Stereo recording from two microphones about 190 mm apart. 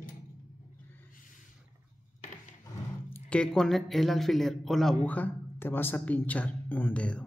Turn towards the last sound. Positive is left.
turn(degrees=5)  # may be behind; listen again after turning